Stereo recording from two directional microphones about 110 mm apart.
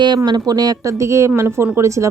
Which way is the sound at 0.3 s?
40° right (ahead or behind).